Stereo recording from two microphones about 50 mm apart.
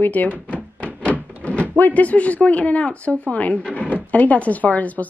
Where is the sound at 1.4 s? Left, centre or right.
Left.